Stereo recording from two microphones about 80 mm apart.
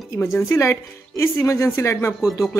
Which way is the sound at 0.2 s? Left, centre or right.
Left.